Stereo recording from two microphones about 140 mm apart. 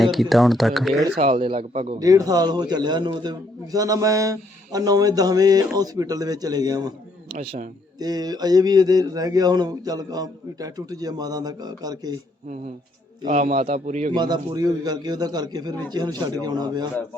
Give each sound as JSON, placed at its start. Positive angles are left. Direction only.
{"t": 0.0, "sound": "speech", "side_deg": 0}
{"t": 1.2, "sound": "a man's voice", "side_deg": -40}
{"t": 2.0, "sound": "a man's voice", "side_deg": -25}
{"t": 7.9, "sound": "a man's voice", "side_deg": -30}
{"t": 13.2, "sound": "a man's voice", "side_deg": -65}
{"t": 14.1, "sound": "a man's voice", "side_deg": -30}